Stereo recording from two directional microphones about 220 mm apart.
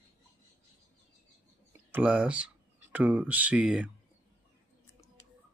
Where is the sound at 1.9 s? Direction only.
5° right (ahead or behind).